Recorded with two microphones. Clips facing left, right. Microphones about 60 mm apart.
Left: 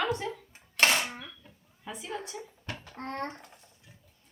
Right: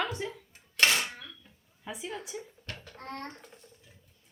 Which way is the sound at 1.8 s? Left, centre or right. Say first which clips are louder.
Left 1 dB; centre.